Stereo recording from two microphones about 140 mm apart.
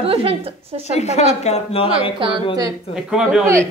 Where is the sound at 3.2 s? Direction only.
5° right (ahead or behind).